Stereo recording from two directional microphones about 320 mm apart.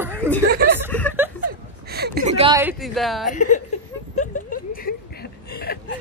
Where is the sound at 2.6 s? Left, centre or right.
Centre.